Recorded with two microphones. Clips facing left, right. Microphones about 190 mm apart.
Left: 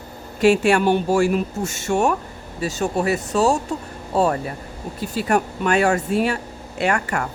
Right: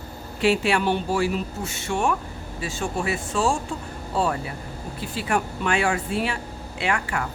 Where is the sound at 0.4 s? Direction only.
45° left (ahead or behind).